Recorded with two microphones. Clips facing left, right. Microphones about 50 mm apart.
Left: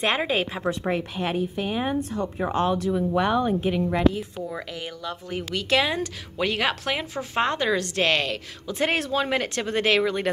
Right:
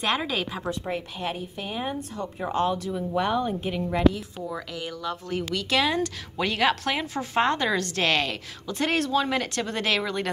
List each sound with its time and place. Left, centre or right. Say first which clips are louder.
0.0 s a woman's voice: left 3 dB; left
0.7 s a woman's voice: left 4 dB; left
1.1 s a woman's voice: left 5 dB; left
2.9 s speech: left 3 dB; left
4.1 s speech: left 2 dB; left
5.9 s a woman's voice: right 2 dB; centre
8.7 s speech: even; centre